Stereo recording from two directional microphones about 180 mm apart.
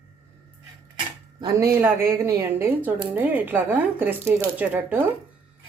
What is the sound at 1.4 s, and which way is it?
Speech, 20° right (ahead or behind).